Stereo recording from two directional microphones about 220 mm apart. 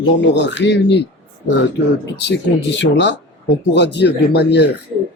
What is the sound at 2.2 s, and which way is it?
Speech, 50° left (ahead or behind).